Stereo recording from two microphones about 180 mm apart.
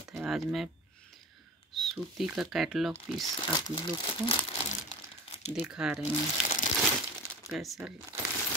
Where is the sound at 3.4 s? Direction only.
25° left (ahead or behind).